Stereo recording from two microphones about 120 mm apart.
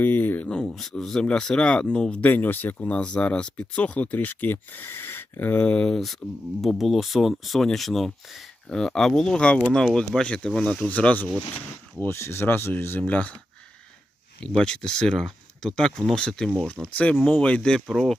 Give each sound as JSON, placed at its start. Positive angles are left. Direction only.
{"t": 0.0, "sound": "speech", "side_deg": 15}
{"t": 14.4, "sound": "speech", "side_deg": 10}